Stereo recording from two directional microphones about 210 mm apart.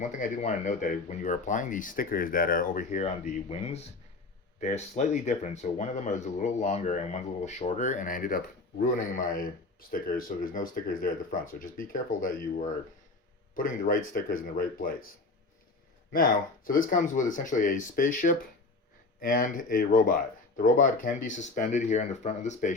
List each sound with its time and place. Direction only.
0.0 s speech: 35° left (ahead or behind)
16.1 s speech: 40° left (ahead or behind)